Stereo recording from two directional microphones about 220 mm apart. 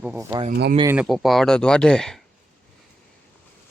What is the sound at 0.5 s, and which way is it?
Speech, 45° right (ahead or behind).